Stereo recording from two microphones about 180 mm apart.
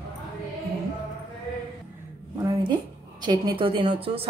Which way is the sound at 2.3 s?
20° right (ahead or behind).